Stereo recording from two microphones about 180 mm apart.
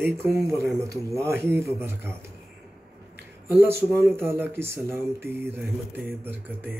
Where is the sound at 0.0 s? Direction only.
15° right (ahead or behind).